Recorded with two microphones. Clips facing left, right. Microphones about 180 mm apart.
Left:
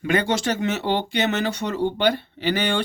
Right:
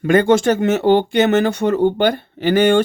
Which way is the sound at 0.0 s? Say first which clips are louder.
Right 9 dB; 50° right (ahead or behind).